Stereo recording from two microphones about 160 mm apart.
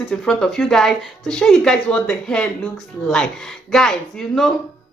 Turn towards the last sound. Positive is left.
turn(degrees=5)  # may be behind; listen again after turning